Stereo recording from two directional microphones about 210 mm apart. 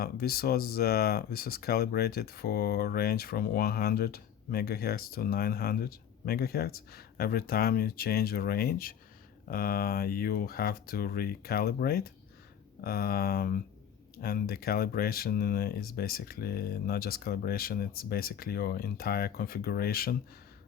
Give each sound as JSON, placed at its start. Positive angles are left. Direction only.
{"t": 0.0, "sound": "speech", "side_deg": 45}